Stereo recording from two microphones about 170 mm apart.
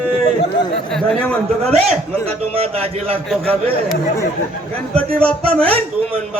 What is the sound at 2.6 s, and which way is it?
Speech, 35° right (ahead or behind).